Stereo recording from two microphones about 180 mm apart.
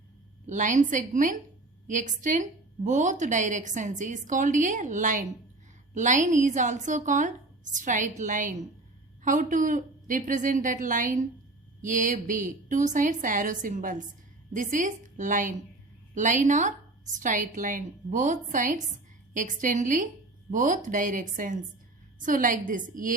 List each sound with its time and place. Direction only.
0.4 s a woman's voice: 45° right (ahead or behind)